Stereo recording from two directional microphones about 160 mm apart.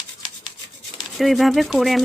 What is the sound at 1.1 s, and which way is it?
Speech, centre (ahead or behind).